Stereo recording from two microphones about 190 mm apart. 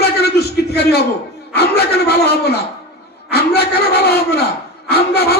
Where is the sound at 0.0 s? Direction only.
60° left (ahead or behind).